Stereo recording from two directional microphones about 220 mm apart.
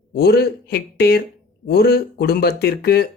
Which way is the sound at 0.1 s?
45° left (ahead or behind).